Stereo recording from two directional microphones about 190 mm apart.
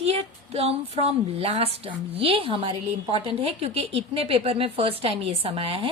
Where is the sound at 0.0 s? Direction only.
35° right (ahead or behind).